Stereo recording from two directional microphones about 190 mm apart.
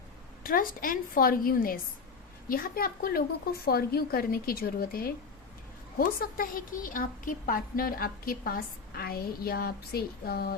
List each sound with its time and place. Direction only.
0.4 s a woman's voice: 50° left (ahead or behind)